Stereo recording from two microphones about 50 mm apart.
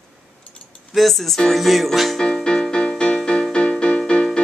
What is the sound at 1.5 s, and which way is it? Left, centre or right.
Music, centre.